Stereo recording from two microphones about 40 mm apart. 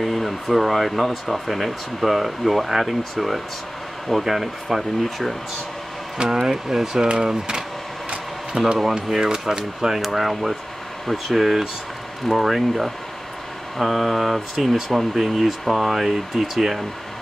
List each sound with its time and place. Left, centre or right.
0.0 s speech: centre